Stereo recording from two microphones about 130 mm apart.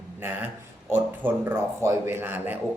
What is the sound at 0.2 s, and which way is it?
Speech, 15° right (ahead or behind).